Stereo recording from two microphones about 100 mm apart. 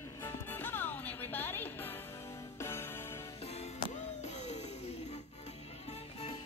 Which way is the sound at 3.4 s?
90° left.